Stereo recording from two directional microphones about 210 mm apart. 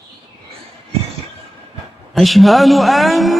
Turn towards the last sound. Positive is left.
turn(degrees=0)  # may be behind; listen again after turning